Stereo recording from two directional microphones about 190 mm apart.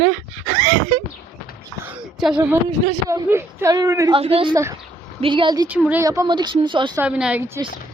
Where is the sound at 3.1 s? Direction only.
15° right (ahead or behind).